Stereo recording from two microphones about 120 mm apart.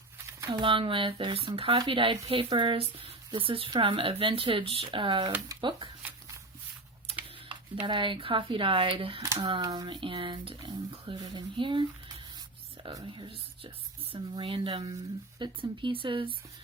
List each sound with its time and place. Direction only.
0.6 s speech: 45° right (ahead or behind)
7.9 s speech: 45° right (ahead or behind)
9.4 s speech: 35° right (ahead or behind)